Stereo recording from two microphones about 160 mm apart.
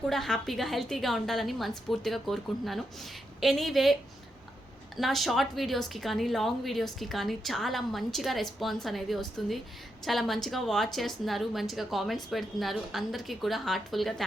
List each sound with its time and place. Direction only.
0.1 s a woman's voice: centre (ahead or behind)
4.9 s a woman's voice: centre (ahead or behind)